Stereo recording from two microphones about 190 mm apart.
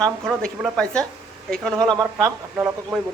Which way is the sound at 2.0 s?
20° right (ahead or behind).